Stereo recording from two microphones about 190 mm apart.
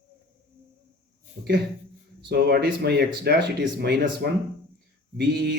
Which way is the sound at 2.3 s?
60° right (ahead or behind).